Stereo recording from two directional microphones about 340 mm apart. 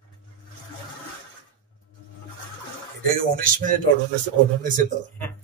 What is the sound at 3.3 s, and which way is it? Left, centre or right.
Speech, right.